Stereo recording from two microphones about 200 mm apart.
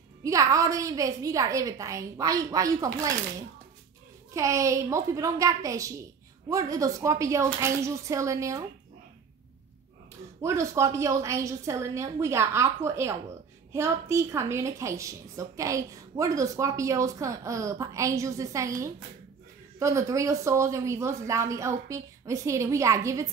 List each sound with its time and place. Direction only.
0.2 s a woman's voice: 15° right (ahead or behind)
10.4 s a woman's voice: 15° right (ahead or behind)